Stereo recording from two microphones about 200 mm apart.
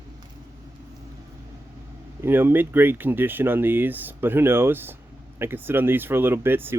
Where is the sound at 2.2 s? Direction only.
10° right (ahead or behind).